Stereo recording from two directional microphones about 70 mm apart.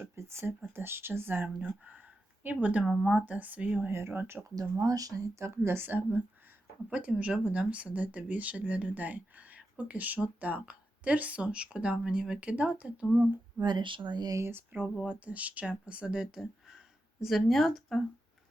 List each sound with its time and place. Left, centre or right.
0.0 s speech: right
1.5 s speech: centre
2.9 s speech: centre
3.2 s speech: right
3.8 s speech: right
4.5 s a woman's voice: right
6.9 s speech: centre
13.6 s speech: right
14.5 s speech: right; by 18.0 s centre